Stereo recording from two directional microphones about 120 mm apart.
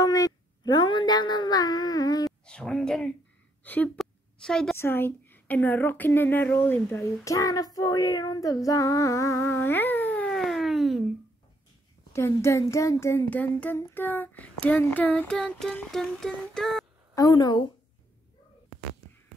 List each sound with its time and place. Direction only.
0.0 s a sound: 30° left (ahead or behind)
2.4 s speech: 5° left (ahead or behind)
4.0 s a sound: 5° left (ahead or behind)
4.7 s a woman's voice: 20° left (ahead or behind); by 11.1 s centre (ahead or behind)
12.1 s a woman's voice: 20° left (ahead or behind); by 16.8 s 5° left (ahead or behind)
17.1 s a woman's voice: 30° left (ahead or behind)